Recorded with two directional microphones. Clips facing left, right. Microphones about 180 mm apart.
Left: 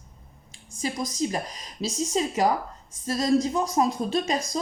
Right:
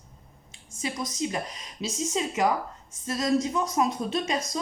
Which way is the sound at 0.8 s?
35° left (ahead or behind).